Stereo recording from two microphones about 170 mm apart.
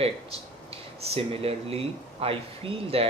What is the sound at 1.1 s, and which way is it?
Speech, 35° right (ahead or behind).